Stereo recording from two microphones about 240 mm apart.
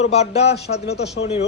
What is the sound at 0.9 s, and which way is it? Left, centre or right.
Speech, left.